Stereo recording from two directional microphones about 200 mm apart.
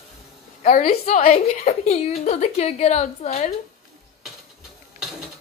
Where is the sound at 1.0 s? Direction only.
45° left (ahead or behind).